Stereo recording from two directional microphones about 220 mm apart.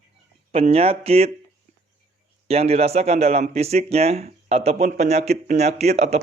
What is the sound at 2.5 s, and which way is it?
Speech, 30° right (ahead or behind).